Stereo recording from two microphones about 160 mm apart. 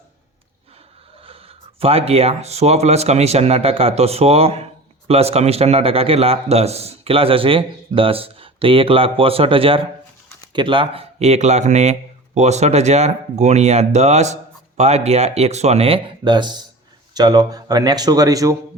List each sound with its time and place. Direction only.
1.8 s speech: 40° right (ahead or behind)
16.2 s speech: 30° right (ahead or behind)